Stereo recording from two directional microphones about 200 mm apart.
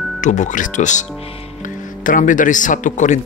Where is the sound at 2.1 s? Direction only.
40° left (ahead or behind).